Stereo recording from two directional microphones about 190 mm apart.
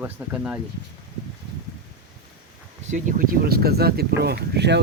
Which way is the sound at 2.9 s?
40° right (ahead or behind).